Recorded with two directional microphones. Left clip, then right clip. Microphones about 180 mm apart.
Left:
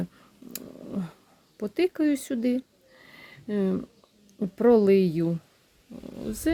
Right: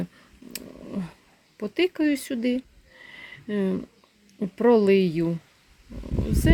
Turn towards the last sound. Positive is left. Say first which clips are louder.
# right 3 dB
turn(degrees=0)  # may be behind; listen again after turning